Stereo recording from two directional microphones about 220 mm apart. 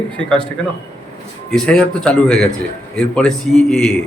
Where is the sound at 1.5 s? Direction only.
Centre (ahead or behind).